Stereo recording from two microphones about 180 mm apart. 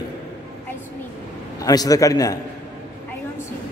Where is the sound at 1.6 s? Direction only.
20° left (ahead or behind).